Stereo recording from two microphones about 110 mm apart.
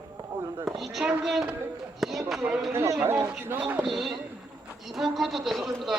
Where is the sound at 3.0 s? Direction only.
20° right (ahead or behind).